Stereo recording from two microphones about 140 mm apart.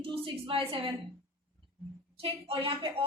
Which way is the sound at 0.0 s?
40° right (ahead or behind).